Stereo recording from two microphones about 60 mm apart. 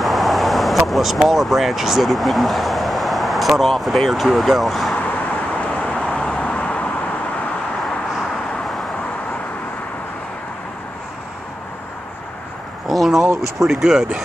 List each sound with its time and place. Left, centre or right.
0.0 s speech: centre
4.9 s vehicle: left
8.2 s vehicle: centre
12.8 s a sound: centre
13.6 s speech: centre